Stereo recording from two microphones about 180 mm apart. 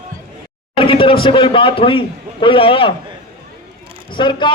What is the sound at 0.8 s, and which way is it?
A man's voice, 30° left (ahead or behind).